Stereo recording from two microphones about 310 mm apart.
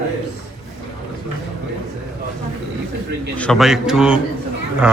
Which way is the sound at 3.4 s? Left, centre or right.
Centre.